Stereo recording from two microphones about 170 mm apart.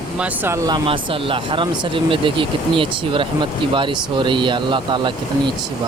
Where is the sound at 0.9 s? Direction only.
30° right (ahead or behind).